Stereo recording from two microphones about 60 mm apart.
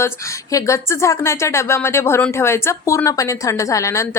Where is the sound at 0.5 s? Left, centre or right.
Left.